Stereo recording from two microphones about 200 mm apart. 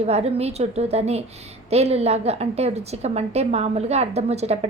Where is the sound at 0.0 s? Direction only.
30° right (ahead or behind).